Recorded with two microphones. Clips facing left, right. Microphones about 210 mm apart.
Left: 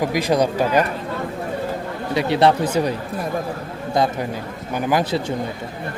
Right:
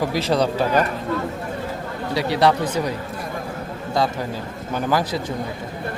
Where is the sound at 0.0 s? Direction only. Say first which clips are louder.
Left 2 dB; 15° left (ahead or behind).